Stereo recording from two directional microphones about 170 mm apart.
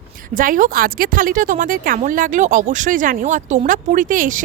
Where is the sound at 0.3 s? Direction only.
55° right (ahead or behind).